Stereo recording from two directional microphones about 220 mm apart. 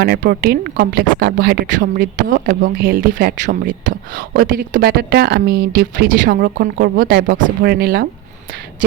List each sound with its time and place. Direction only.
0.0 s a woman's voice: 45° right (ahead or behind)